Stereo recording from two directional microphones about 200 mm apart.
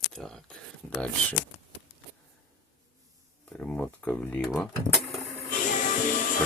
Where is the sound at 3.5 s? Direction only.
5° left (ahead or behind).